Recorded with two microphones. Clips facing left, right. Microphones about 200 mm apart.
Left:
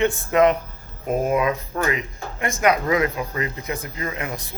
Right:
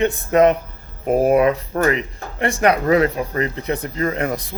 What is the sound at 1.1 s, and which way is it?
Speech, 70° right (ahead or behind).